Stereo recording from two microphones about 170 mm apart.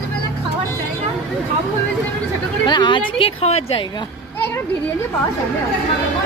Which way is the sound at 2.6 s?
25° left (ahead or behind).